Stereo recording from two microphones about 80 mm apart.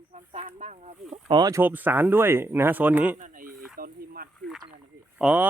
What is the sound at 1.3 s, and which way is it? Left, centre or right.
Speech, right.